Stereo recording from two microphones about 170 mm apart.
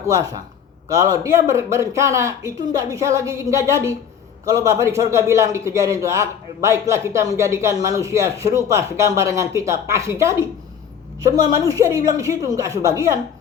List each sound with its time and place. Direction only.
0.1 s a woman's voice: 20° right (ahead or behind)